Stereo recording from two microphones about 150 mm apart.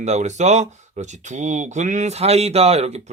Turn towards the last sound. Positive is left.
turn(degrees=-45)  # may be behind; listen again after turning